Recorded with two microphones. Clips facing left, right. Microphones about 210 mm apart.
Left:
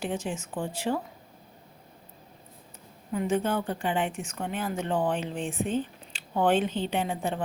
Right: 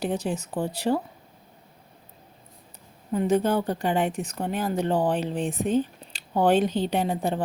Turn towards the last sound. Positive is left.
turn(degrees=-35)  # may be behind; listen again after turning